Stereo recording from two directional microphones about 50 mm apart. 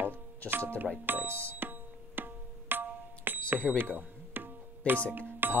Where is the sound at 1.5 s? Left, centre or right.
Right.